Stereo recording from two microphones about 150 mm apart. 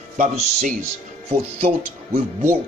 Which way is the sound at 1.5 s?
40° right (ahead or behind).